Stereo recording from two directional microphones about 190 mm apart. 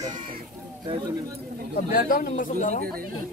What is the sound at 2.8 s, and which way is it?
Speech, 50° right (ahead or behind).